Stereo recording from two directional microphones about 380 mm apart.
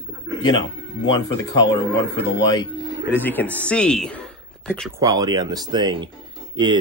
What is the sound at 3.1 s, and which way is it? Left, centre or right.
Speech, centre.